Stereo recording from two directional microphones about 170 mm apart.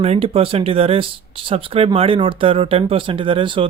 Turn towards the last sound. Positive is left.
turn(degrees=-30)  # may be behind; listen again after turning